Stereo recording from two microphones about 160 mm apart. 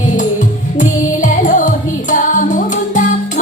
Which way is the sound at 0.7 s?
50° left (ahead or behind).